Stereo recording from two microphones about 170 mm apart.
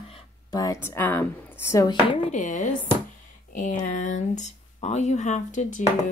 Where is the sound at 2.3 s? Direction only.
45° left (ahead or behind).